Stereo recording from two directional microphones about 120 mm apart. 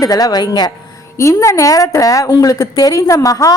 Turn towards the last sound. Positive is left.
turn(degrees=30)  # may be behind; listen again after turning